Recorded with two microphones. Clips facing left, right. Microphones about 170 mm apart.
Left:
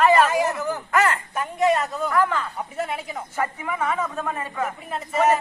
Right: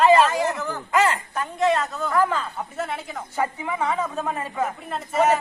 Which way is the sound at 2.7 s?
10° left (ahead or behind).